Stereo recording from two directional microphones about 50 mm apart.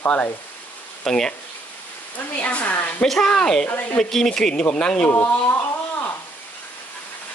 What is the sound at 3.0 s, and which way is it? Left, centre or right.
Speech, centre.